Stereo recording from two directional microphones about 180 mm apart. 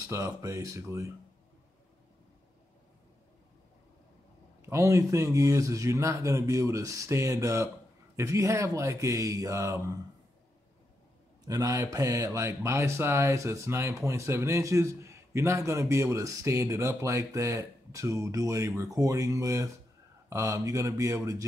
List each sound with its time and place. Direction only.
0.1 s speech: 15° right (ahead or behind)
4.6 s speech: 15° right (ahead or behind)
11.4 s speech: 20° right (ahead or behind)